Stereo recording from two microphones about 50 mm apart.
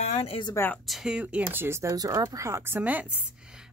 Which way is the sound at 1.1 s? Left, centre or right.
Right.